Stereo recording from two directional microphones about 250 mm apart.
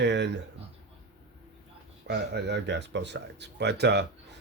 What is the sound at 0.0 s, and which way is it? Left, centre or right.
Speech, right.